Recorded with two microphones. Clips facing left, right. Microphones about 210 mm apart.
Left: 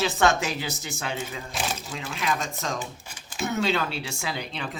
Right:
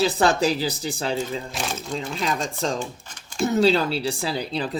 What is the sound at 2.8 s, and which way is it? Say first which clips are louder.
Typing: right 4 dB; 5° left (ahead or behind).